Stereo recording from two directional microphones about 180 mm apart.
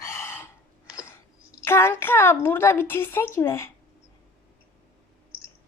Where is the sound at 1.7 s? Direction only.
15° left (ahead or behind).